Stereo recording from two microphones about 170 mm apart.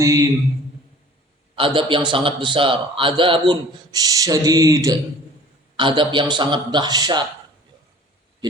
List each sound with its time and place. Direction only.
0.0 s a man's voice: 20° right (ahead or behind)
1.5 s a man's voice: 30° right (ahead or behind)